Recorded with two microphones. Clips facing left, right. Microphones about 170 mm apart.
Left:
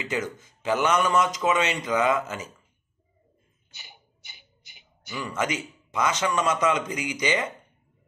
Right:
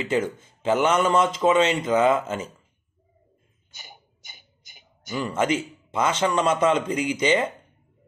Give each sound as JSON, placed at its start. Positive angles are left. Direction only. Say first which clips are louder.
{"t": 0.0, "sound": "speech", "louder": "right 5 dB", "side_deg": -30}
{"t": 3.7, "sound": "a sound", "louder": "right 4 dB", "side_deg": -45}
{"t": 5.2, "sound": "speech", "louder": "right 5 dB", "side_deg": -30}